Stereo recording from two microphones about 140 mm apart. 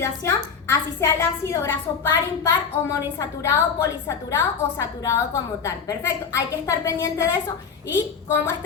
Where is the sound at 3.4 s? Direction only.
20° left (ahead or behind).